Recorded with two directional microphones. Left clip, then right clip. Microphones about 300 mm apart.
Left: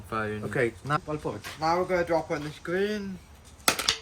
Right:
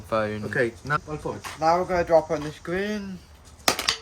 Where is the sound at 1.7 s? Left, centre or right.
Right.